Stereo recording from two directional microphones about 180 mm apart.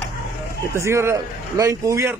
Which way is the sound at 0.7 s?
15° right (ahead or behind).